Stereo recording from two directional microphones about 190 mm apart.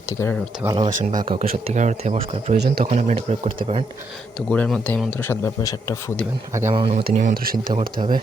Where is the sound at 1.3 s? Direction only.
45° right (ahead or behind).